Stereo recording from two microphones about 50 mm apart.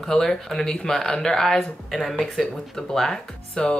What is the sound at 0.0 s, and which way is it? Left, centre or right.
Speech, centre.